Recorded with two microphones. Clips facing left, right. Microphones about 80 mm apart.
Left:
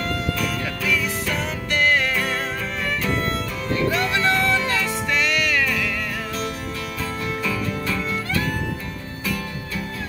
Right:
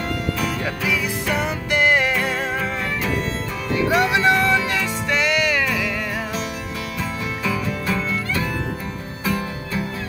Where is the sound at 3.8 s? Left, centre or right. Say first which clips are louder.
Right 4 dB; centre.